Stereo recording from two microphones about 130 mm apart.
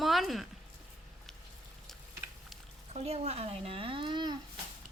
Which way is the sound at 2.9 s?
55° right (ahead or behind).